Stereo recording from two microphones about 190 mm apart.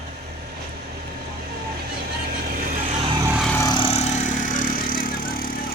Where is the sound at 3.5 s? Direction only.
20° left (ahead or behind); by 5.6 s 50° left (ahead or behind).